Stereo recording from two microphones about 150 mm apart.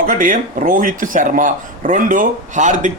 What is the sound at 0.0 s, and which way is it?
Speech, 65° right (ahead or behind).